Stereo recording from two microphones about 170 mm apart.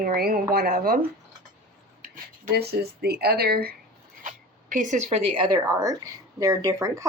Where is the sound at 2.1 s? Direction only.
60° right (ahead or behind).